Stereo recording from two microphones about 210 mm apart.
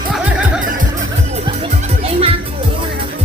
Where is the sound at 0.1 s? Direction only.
5° right (ahead or behind).